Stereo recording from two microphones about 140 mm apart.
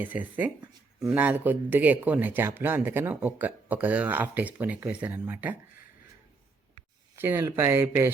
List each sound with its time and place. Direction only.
0.0 s speech: 10° right (ahead or behind)
7.2 s speech: 15° right (ahead or behind)